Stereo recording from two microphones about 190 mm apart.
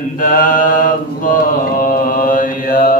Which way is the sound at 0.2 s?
45° left (ahead or behind).